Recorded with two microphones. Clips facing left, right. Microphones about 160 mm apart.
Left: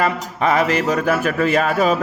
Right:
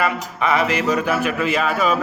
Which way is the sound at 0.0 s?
40° left (ahead or behind).